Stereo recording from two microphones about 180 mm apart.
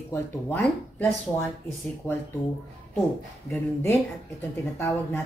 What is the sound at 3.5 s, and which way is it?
Speech, 10° left (ahead or behind).